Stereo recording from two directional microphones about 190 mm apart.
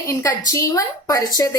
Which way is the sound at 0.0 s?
15° left (ahead or behind).